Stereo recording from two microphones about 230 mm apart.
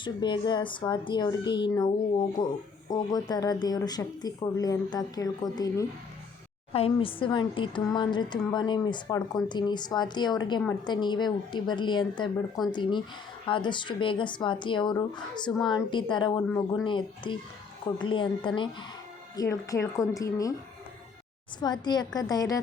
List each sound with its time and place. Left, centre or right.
0.0 s speech: centre
21.6 s speech: centre